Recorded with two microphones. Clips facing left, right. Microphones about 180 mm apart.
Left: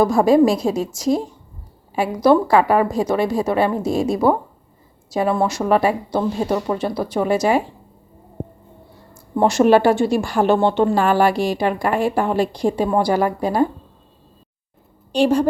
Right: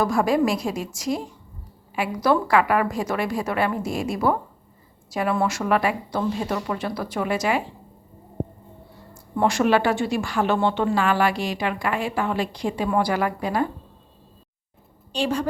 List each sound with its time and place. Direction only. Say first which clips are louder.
0.0 s a woman's voice: left 7 dB; 25° left (ahead or behind)
9.3 s a woman's voice: left 6 dB; 35° left (ahead or behind)